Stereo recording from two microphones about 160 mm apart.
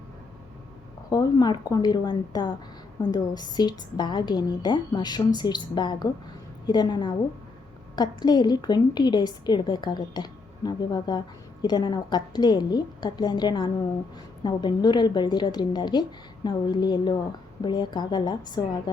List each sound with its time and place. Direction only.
1.1 s a woman's voice: 25° left (ahead or behind)